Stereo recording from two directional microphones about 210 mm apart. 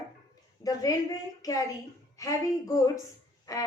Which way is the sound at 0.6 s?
15° left (ahead or behind).